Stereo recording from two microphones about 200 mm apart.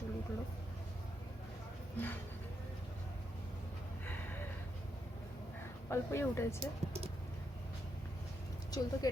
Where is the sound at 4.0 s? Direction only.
10° left (ahead or behind).